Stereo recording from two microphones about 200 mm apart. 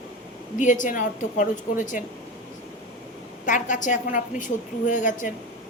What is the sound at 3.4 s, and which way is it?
A woman's voice, 40° left (ahead or behind).